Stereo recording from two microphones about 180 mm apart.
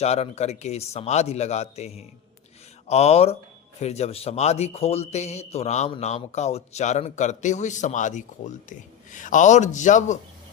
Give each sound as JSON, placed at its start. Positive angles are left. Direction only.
{"t": 0.0, "sound": "a man's voice", "side_deg": 35}